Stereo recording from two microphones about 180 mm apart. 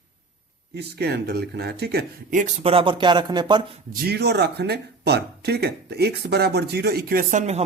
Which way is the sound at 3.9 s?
60° right (ahead or behind).